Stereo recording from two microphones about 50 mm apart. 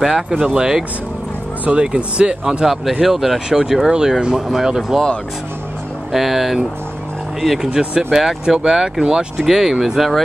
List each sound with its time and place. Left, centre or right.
0.0 s speech: centre
6.1 s speech: centre
7.7 s speech: centre